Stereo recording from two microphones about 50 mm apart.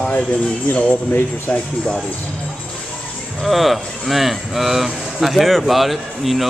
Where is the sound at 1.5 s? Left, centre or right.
Centre.